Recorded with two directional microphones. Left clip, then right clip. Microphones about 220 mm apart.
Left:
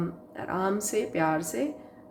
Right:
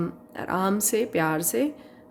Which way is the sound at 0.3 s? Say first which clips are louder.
Right 3 dB; 50° right (ahead or behind).